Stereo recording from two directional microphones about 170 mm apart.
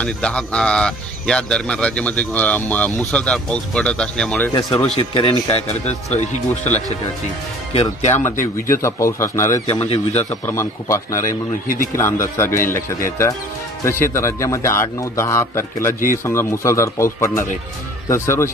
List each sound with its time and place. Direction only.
0.0 s speech: 5° left (ahead or behind)
4.9 s speech: 30° left (ahead or behind)
8.6 s a man's voice: 15° left (ahead or behind)
9.7 s speech: 35° left (ahead or behind)
10.4 s a man's voice: 15° left (ahead or behind)
11.1 s a man's voice: 50° left (ahead or behind)
11.9 s a man's voice: 15° left (ahead or behind)